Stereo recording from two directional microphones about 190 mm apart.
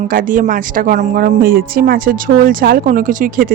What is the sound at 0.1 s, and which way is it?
Speech, 45° right (ahead or behind).